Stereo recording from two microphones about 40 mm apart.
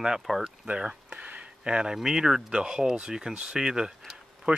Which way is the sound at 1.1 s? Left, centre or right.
Right.